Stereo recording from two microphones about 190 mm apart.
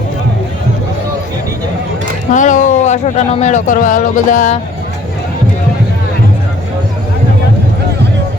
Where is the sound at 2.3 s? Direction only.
40° left (ahead or behind).